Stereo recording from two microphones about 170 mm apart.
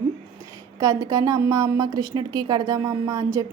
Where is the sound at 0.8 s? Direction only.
20° right (ahead or behind).